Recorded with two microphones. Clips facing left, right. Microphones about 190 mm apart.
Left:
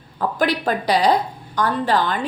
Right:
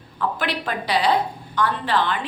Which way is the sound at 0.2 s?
40° left (ahead or behind).